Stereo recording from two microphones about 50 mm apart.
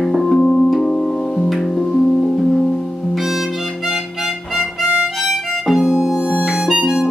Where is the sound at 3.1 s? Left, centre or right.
Centre.